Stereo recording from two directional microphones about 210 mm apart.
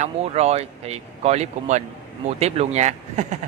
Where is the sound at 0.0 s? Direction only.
30° right (ahead or behind).